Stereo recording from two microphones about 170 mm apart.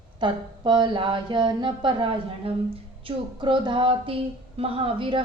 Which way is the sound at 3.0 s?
30° right (ahead or behind).